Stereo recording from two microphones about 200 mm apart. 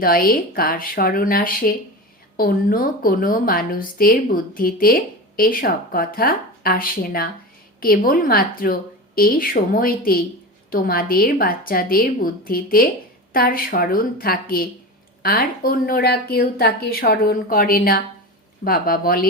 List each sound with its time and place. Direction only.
0.0 s a woman's voice: 45° left (ahead or behind)